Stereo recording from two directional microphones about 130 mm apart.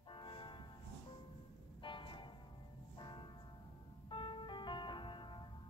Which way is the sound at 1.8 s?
40° left (ahead or behind).